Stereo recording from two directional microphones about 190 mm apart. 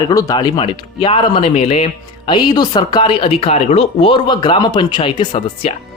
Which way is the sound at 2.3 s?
20° left (ahead or behind).